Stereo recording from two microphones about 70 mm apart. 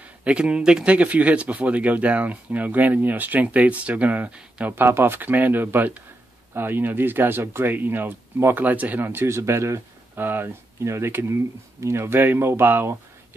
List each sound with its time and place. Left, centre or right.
0.2 s speech: centre; by 12.9 s right